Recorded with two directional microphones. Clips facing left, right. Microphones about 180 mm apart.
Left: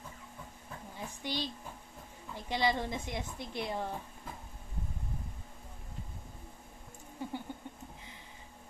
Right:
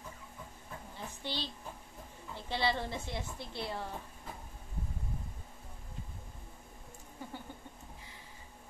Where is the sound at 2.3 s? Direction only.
15° left (ahead or behind).